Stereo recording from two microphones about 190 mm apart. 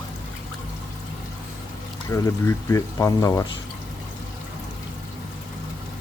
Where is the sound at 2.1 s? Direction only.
15° left (ahead or behind).